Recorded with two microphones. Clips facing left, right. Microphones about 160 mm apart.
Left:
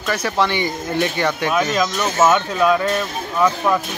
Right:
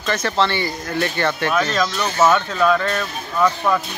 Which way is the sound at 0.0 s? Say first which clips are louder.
Even; 10° left (ahead or behind).